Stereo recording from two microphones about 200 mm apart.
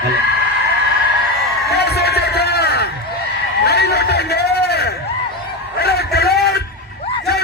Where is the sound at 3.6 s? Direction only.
55° left (ahead or behind).